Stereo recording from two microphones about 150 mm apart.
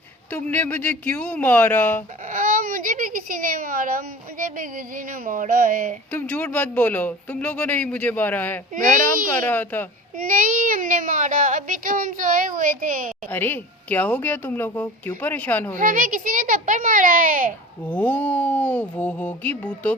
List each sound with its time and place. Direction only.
0.3 s speech: 10° left (ahead or behind)
2.3 s a child's voice: 65° right (ahead or behind)
6.1 s speech: 10° left (ahead or behind)
10.2 s speech: 65° right (ahead or behind)
13.3 s speech: 15° left (ahead or behind)
15.8 s speech: 65° right (ahead or behind)
17.8 s speech: 10° left (ahead or behind)